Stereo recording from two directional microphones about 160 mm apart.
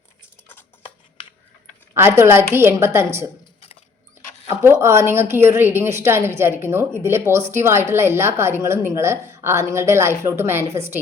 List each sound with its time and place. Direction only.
0.8 s a sound: 30° left (ahead or behind)
2.0 s speech: 15° right (ahead or behind)
4.4 s speech: 15° right (ahead or behind)